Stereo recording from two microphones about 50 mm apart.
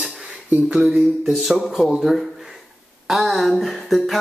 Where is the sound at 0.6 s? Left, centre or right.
Centre.